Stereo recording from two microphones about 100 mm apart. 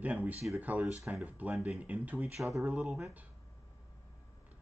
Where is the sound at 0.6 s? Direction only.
15° right (ahead or behind).